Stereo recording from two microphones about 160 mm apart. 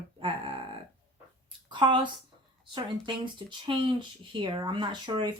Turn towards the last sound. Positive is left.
turn(degrees=-30)  # may be behind; listen again after turning